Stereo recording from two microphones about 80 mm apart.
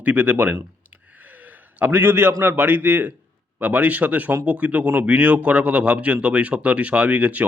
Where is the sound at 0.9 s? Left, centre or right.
Right.